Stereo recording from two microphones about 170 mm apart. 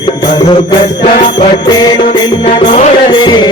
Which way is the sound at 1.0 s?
50° left (ahead or behind).